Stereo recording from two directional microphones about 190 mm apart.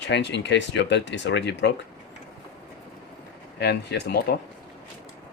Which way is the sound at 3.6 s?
65° left (ahead or behind).